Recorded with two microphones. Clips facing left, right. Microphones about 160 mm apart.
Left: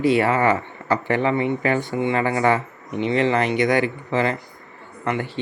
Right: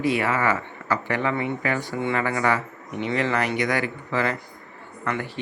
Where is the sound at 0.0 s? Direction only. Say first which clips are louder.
Left 5 dB; 30° left (ahead or behind).